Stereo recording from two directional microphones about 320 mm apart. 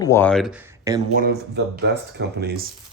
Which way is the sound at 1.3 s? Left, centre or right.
Right.